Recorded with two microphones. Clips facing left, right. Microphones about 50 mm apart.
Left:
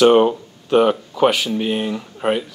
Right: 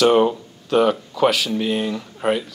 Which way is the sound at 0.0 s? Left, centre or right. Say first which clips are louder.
Left 3 dB; centre.